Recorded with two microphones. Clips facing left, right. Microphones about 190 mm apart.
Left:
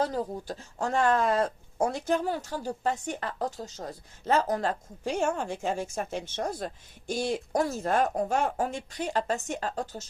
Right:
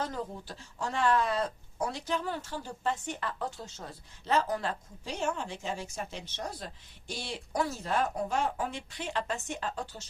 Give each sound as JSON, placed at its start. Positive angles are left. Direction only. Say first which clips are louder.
{"t": 0.0, "sound": "speech", "louder": "left 6 dB", "side_deg": 35}